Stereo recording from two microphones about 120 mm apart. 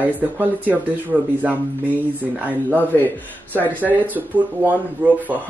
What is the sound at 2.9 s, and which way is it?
Speech, 15° left (ahead or behind).